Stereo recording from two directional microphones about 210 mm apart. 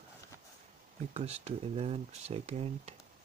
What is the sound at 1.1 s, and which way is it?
Speech, 30° right (ahead or behind).